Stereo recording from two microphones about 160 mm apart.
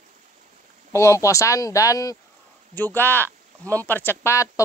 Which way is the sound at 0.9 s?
20° left (ahead or behind).